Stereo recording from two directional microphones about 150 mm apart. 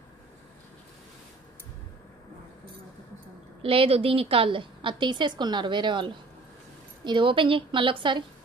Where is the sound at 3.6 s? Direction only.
40° right (ahead or behind).